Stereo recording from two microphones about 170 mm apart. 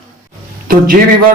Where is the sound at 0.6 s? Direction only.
55° right (ahead or behind).